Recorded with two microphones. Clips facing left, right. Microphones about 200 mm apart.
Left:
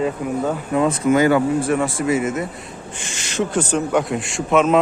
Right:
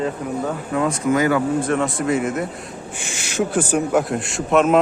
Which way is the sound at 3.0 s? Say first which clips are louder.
Even; 10° right (ahead or behind).